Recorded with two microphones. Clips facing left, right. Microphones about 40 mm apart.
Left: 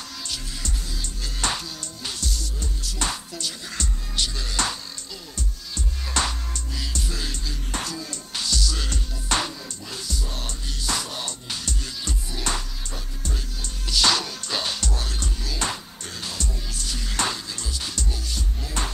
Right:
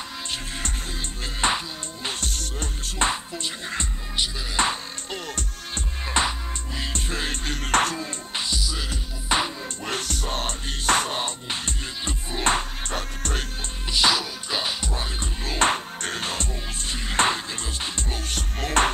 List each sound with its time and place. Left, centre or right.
0.3 s music: right
1.4 s music: right
2.0 s music: right
3.0 s music: right
5.1 s music: right
6.2 s music: right
6.8 s music: right
8.0 s music: right
9.8 s music: right
12.9 s music: right
13.8 s music: right
15.4 s music: right
18.3 s music: right